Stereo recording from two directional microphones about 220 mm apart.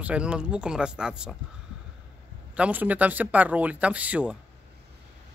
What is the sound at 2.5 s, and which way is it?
Speech, 5° right (ahead or behind).